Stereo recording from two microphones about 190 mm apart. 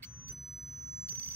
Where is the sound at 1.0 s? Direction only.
10° left (ahead or behind).